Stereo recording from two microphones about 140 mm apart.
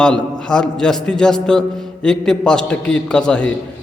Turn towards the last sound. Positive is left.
turn(degrees=5)  # may be behind; listen again after turning